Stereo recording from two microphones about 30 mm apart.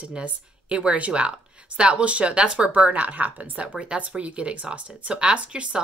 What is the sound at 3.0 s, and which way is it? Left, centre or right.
Speech, right.